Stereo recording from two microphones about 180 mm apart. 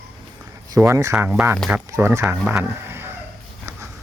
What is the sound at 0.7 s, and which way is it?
Speech, 15° right (ahead or behind).